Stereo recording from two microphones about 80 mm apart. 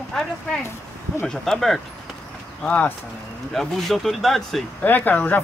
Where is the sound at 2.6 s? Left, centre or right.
Centre.